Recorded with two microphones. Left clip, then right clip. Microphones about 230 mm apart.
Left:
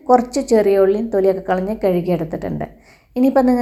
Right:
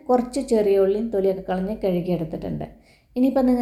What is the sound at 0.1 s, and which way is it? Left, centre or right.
A woman's voice, left.